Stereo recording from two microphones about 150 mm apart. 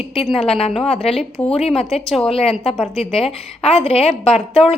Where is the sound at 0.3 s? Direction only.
40° left (ahead or behind).